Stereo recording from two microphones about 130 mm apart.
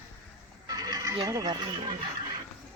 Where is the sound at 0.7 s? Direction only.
30° right (ahead or behind).